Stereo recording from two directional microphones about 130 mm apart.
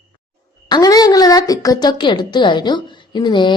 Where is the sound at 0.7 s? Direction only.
30° left (ahead or behind).